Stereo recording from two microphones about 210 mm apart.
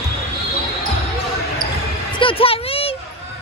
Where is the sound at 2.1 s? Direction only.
25° left (ahead or behind).